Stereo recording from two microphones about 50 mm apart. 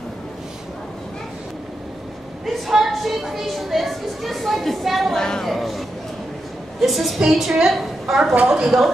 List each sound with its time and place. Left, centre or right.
2.4 s a woman's voice: centre
5.1 s a woman's voice: centre